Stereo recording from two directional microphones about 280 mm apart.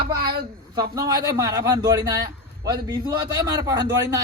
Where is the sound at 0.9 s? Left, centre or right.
Centre.